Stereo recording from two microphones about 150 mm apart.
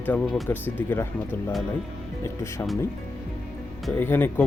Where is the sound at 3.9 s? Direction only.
15° left (ahead or behind).